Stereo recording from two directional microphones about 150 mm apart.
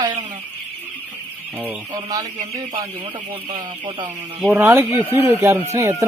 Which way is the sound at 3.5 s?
30° right (ahead or behind).